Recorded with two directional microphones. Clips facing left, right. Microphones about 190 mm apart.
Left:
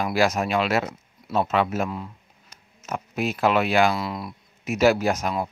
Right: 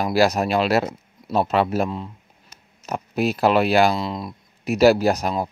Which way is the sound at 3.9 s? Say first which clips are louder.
Right 3 dB; 20° right (ahead or behind).